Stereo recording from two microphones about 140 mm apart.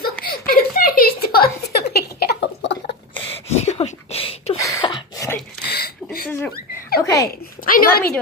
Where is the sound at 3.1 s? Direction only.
45° left (ahead or behind).